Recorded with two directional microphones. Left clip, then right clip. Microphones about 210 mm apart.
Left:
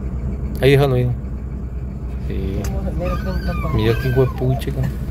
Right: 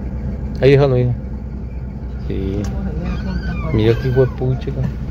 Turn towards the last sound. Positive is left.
turn(degrees=-10)  # may be behind; listen again after turning